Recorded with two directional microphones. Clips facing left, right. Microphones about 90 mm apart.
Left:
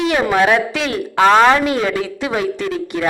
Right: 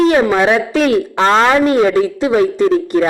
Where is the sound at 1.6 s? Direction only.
30° right (ahead or behind).